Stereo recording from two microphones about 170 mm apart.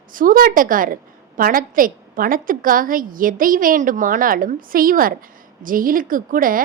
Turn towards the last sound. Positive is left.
turn(degrees=-55)  # may be behind; listen again after turning